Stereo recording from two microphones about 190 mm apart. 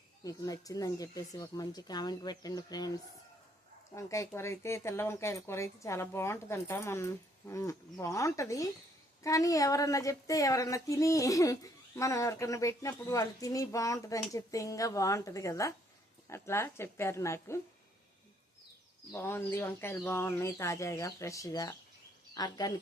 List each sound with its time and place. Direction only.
0.3 s speech: 20° left (ahead or behind)
19.1 s speech: 10° left (ahead or behind)